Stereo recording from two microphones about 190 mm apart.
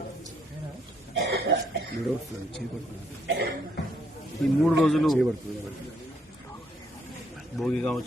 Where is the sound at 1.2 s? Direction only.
65° right (ahead or behind).